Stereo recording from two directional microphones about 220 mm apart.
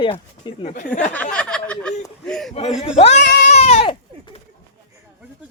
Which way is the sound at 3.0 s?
30° left (ahead or behind).